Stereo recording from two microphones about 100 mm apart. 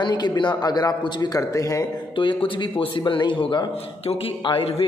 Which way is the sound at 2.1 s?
55° left (ahead or behind).